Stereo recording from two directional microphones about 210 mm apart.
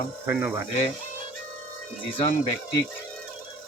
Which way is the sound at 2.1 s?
30° left (ahead or behind).